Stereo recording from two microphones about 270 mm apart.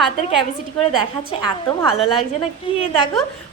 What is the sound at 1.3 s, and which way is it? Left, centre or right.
Speech, centre.